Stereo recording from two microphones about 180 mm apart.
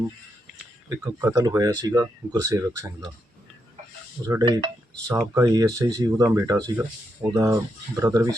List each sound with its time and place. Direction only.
0.9 s speech: 20° right (ahead or behind)
4.2 s speech: 20° right (ahead or behind)